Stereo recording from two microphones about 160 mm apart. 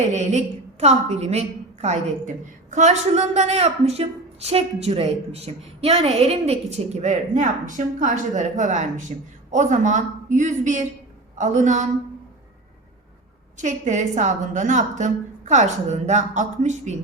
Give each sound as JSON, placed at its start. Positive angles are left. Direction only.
{"t": 0.0, "sound": "a woman's voice", "side_deg": -50}
{"t": 13.6, "sound": "a woman's voice", "side_deg": -50}